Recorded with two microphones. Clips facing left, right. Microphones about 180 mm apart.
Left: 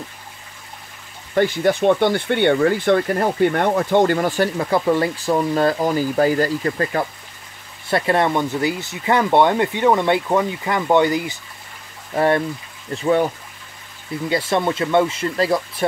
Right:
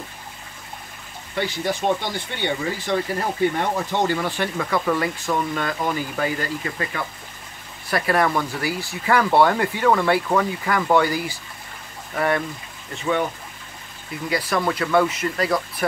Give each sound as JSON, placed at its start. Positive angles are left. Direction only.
{"t": 1.3, "sound": "speech", "side_deg": 50}
{"t": 4.6, "sound": "speech", "side_deg": 30}
{"t": 7.9, "sound": "speech", "side_deg": 25}
{"t": 14.3, "sound": "speech", "side_deg": 25}